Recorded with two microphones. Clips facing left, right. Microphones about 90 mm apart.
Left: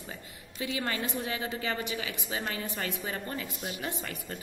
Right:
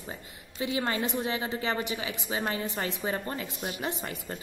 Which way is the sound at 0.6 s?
25° right (ahead or behind).